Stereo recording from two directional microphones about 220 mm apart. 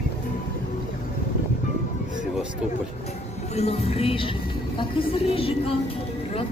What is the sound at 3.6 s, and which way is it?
Speech, 25° left (ahead or behind).